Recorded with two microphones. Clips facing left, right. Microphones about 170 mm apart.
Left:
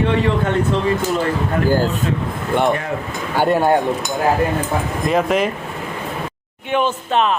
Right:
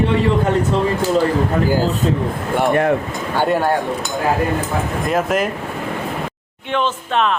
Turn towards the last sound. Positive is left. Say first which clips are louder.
# left 1 dB
turn(degrees=10)  # may be behind; listen again after turning